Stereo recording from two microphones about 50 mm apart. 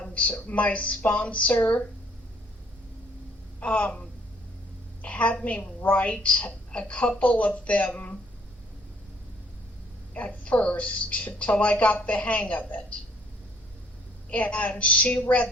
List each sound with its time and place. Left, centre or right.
0.1 s a woman's voice: left
3.6 s a woman's voice: left
5.0 s a woman's voice: left
10.2 s a woman's voice: left
14.3 s a woman's voice: left